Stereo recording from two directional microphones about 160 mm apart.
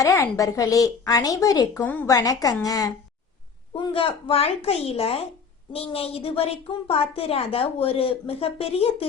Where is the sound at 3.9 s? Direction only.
35° left (ahead or behind).